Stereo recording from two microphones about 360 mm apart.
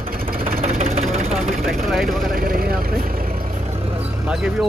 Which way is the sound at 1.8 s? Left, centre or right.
Centre.